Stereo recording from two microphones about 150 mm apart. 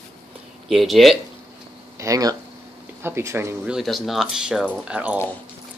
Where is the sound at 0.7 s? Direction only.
Centre (ahead or behind).